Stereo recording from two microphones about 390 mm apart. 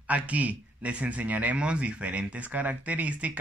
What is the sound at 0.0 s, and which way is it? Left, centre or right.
A man's voice, centre.